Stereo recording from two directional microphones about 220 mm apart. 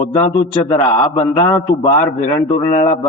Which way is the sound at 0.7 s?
30° left (ahead or behind).